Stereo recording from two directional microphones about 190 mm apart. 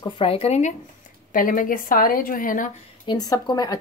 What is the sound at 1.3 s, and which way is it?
A woman's voice, 45° left (ahead or behind).